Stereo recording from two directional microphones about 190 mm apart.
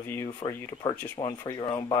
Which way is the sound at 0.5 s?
15° left (ahead or behind).